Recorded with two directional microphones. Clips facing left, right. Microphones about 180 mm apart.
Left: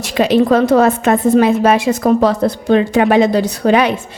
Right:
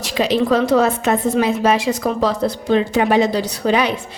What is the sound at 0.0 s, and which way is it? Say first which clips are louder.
A woman's voice: left 5 dB; 50° left (ahead or behind).